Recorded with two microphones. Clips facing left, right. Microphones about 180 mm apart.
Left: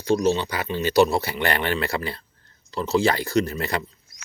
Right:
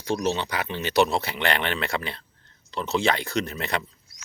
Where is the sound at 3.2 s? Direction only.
35° left (ahead or behind).